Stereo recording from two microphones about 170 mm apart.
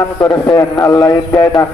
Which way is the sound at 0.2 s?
20° left (ahead or behind).